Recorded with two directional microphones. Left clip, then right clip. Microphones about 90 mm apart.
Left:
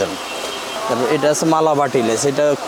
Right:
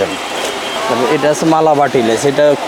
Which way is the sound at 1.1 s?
40° left (ahead or behind).